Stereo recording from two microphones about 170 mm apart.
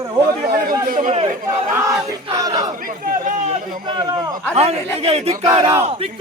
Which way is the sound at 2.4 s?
20° right (ahead or behind).